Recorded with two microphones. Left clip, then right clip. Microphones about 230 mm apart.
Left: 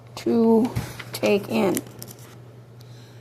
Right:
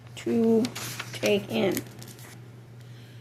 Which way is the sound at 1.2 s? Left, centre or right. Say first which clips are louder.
Left 4 dB; left.